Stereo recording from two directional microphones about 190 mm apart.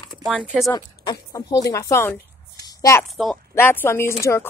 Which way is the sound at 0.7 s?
20° left (ahead or behind).